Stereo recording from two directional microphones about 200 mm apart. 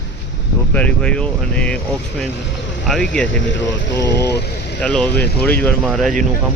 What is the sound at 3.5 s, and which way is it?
Speech, 65° left (ahead or behind).